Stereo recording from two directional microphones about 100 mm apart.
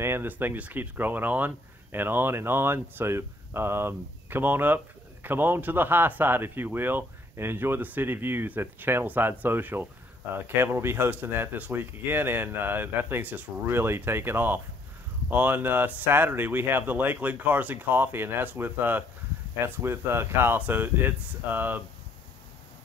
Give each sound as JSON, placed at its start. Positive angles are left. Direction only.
{"t": 0.0, "sound": "speech", "side_deg": -20}